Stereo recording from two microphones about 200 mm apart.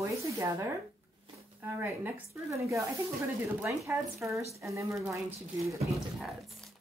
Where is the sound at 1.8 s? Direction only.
10° right (ahead or behind).